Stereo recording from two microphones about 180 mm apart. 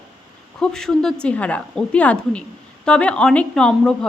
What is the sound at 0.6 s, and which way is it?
A woman's voice, 5° left (ahead or behind).